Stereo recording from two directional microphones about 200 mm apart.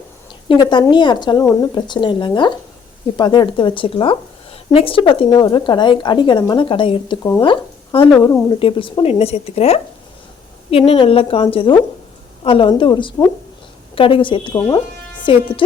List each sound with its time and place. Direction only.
0.4 s a woman's voice: 25° left (ahead or behind)